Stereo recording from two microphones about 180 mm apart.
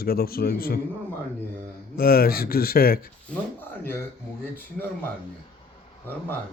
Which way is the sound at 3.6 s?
10° left (ahead or behind).